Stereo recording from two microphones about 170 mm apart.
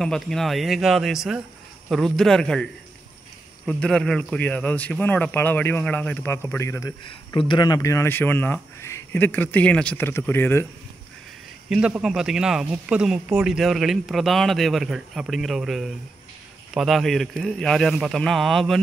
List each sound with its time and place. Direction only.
0.0 s speech: 5° left (ahead or behind)
7.3 s speech: 30° left (ahead or behind)
11.7 s speech: 5° right (ahead or behind)